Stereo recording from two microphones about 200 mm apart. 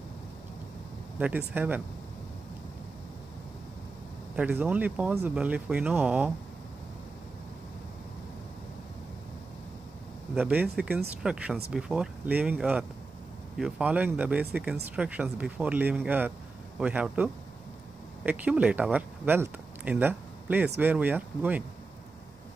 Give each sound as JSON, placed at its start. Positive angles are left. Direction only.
{"t": 1.2, "sound": "speech", "side_deg": -10}
{"t": 4.4, "sound": "speech", "side_deg": -5}
{"t": 10.3, "sound": "speech", "side_deg": -10}